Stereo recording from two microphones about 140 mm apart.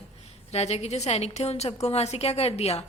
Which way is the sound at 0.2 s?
50° left (ahead or behind).